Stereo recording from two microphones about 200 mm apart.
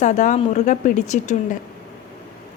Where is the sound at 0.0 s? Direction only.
35° left (ahead or behind).